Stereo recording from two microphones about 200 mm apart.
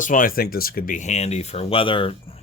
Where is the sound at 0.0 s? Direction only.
40° left (ahead or behind).